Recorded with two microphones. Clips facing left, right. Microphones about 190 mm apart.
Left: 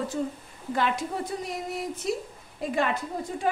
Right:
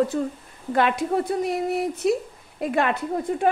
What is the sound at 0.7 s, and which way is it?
A woman's voice, 60° right (ahead or behind).